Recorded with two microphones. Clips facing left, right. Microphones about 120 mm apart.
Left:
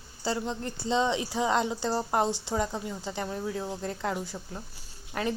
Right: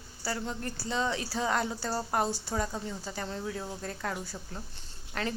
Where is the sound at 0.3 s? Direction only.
20° left (ahead or behind).